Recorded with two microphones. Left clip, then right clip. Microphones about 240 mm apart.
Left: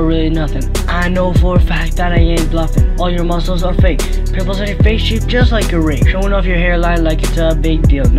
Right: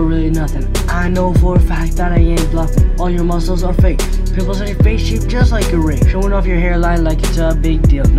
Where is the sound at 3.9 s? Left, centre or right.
Centre.